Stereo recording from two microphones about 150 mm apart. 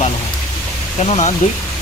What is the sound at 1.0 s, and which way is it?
Speech, 50° left (ahead or behind).